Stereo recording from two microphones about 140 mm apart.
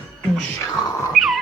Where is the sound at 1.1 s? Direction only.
Centre (ahead or behind).